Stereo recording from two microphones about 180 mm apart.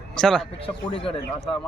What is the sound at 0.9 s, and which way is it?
Speech, 30° left (ahead or behind).